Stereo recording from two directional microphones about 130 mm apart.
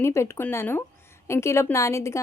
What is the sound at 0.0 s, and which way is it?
A woman's voice, 20° left (ahead or behind).